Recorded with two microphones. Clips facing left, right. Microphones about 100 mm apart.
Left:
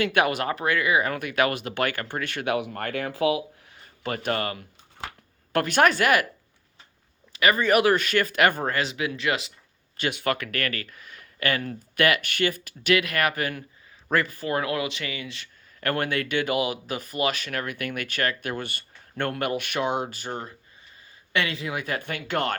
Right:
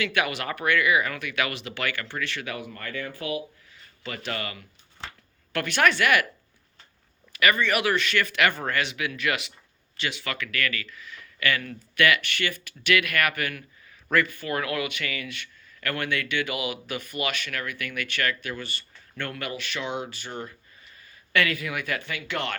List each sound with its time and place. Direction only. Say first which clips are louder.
0.0 s speech: left 4 dB; 45° left (ahead or behind)
0.4 s speech: even; 30° left (ahead or behind); by 2.5 s 50° left (ahead or behind)
2.5 s speech: left 8 dB; 65° left (ahead or behind); by 3.8 s 90° left
3.8 s speech: left 6 dB; 50° left (ahead or behind)
7.3 s speech: left 3 dB; 30° left (ahead or behind)
10.0 s speech: left 5 dB; 50° left (ahead or behind)
21.3 s speech: right 1 dB; 25° left (ahead or behind)
22.0 s speech: left 4 dB; 45° left (ahead or behind)